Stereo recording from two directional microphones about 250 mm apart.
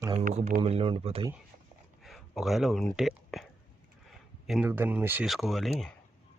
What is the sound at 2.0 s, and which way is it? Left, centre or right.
Speech, centre.